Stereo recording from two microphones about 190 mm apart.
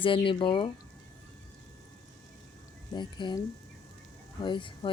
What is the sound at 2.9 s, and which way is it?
Speech, 25° left (ahead or behind).